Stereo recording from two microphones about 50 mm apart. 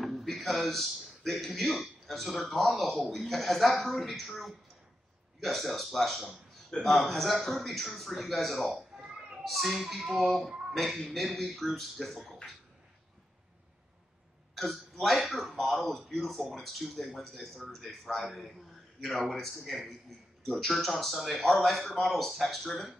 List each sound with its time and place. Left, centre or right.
0.0 s a man's voice: centre
8.9 s children playing: centre
9.4 s speech: centre
14.5 s a man's voice: centre